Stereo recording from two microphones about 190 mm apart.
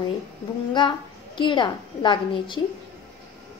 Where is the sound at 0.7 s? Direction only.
25° left (ahead or behind).